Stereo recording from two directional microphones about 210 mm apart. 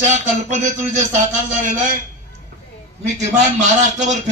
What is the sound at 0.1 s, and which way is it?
Speech, 35° right (ahead or behind).